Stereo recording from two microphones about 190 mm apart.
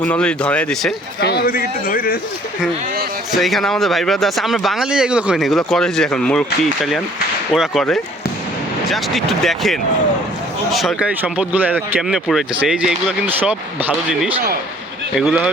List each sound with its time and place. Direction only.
0.0 s speech: 5° left (ahead or behind)
1.2 s a man's voice: 60° left (ahead or behind)
3.3 s speech: centre (ahead or behind)
7.5 s speech: centre (ahead or behind)